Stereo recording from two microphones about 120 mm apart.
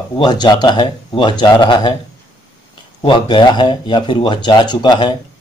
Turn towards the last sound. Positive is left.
turn(degrees=40)  # may be behind; listen again after turning